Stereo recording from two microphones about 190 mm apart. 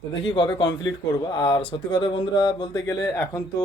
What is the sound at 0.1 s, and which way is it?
Speech, 25° left (ahead or behind).